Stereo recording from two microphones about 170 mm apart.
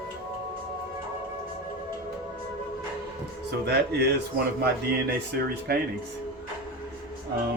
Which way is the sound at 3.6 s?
75° right (ahead or behind).